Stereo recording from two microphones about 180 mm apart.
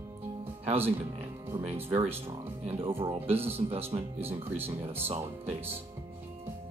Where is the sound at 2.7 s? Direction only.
30° right (ahead or behind).